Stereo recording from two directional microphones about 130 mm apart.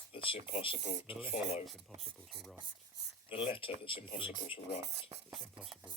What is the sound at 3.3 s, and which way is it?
Speech, 45° left (ahead or behind).